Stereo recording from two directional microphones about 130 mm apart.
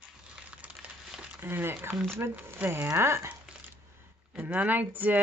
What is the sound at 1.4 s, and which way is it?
Speech, 15° right (ahead or behind).